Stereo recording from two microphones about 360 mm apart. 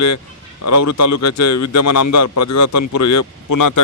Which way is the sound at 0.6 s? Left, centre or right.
Left.